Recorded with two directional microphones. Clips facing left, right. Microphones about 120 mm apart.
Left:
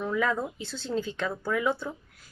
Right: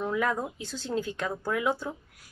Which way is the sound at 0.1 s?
10° right (ahead or behind).